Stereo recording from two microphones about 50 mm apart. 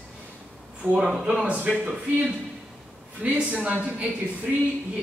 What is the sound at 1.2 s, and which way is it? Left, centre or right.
Speech, centre.